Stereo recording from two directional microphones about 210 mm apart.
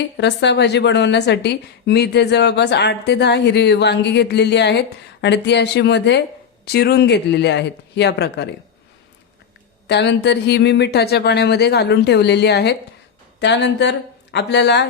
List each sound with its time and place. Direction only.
0.2 s a woman's voice: 55° left (ahead or behind)
9.8 s a woman's voice: 55° left (ahead or behind)